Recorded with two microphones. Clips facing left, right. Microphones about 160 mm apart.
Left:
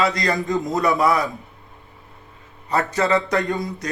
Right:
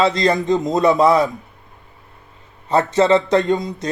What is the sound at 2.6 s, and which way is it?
A man's voice, 25° right (ahead or behind).